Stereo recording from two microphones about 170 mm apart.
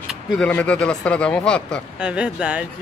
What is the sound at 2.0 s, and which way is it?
Speech, 5° right (ahead or behind).